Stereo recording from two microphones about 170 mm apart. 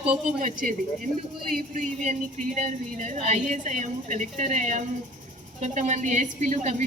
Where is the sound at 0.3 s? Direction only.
50° right (ahead or behind).